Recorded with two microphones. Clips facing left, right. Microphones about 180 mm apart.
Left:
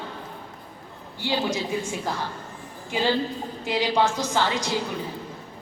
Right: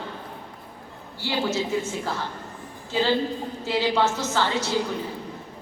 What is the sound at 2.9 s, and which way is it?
A woman's voice, 15° left (ahead or behind).